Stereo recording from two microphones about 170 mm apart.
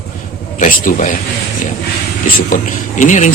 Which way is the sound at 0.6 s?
50° left (ahead or behind).